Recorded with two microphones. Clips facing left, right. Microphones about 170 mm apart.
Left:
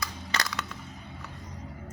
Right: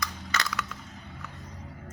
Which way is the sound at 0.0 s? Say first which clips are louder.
Even; 30° left (ahead or behind).